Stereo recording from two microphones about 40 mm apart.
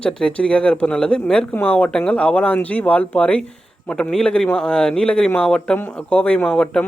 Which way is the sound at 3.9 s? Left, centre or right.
Centre.